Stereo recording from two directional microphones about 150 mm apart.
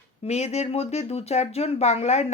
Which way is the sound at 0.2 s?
45° left (ahead or behind).